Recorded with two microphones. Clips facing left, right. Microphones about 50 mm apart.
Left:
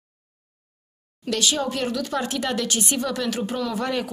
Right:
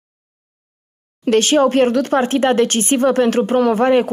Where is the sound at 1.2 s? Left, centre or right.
Right.